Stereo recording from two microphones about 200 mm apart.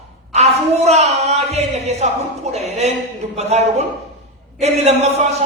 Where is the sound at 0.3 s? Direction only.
35° right (ahead or behind).